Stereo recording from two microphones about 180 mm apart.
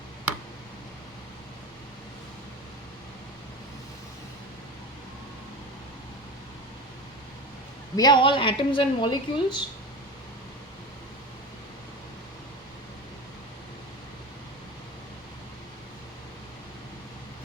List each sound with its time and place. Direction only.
7.9 s a woman's voice: 25° left (ahead or behind)